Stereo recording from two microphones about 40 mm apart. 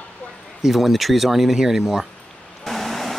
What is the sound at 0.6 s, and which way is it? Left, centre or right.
Speech, centre.